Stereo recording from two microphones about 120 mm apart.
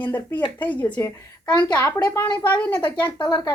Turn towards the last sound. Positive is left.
turn(degrees=30)  # may be behind; listen again after turning